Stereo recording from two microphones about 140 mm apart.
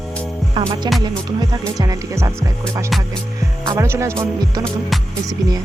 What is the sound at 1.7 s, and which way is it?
Speech, 25° right (ahead or behind).